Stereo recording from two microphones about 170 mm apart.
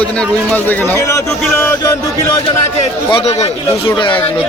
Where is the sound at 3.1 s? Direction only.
35° left (ahead or behind).